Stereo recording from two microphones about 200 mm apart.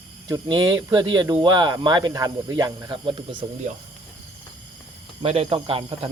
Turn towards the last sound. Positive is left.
turn(degrees=-30)  # may be behind; listen again after turning